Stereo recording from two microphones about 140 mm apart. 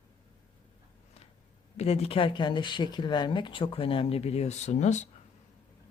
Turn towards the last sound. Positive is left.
turn(degrees=55)  # may be behind; listen again after turning